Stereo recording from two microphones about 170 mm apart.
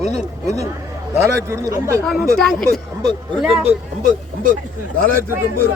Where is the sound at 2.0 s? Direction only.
Centre (ahead or behind).